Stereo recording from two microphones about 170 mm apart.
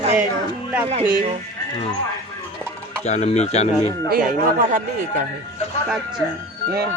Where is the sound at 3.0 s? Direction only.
40° left (ahead or behind).